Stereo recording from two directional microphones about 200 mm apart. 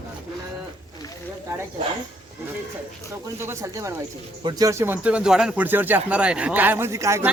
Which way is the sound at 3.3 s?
15° right (ahead or behind).